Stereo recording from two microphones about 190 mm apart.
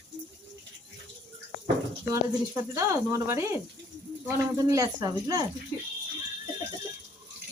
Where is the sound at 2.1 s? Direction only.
15° right (ahead or behind).